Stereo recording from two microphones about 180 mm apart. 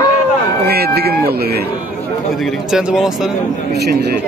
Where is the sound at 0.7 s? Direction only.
60° right (ahead or behind).